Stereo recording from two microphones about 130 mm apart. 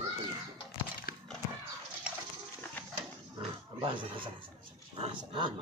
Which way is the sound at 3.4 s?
40° right (ahead or behind).